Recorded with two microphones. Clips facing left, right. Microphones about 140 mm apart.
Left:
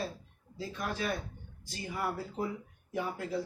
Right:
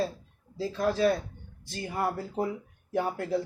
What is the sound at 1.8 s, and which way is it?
Speech, 60° right (ahead or behind).